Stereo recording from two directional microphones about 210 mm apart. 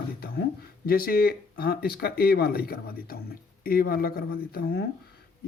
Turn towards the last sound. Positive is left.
turn(degrees=50)  # may be behind; listen again after turning